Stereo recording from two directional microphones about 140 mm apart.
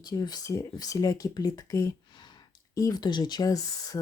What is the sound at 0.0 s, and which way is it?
Speech, 30° left (ahead or behind).